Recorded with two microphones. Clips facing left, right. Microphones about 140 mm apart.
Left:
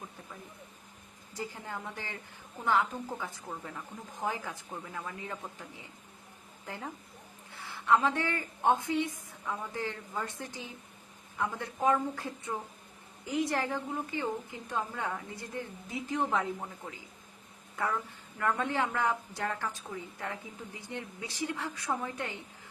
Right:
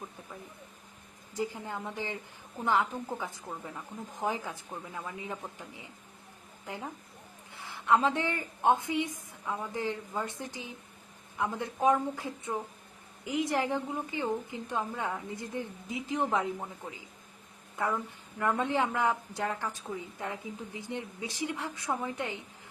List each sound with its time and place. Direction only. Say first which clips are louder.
1.3 s a woman's voice: right 4 dB; 15° right (ahead or behind)
3.5 s a woman's voice: even; 5° right (ahead or behind)
4.2 s a woman's voice: right 2 dB; 20° right (ahead or behind)
18.3 s a woman's voice: right 2 dB; 20° right (ahead or behind)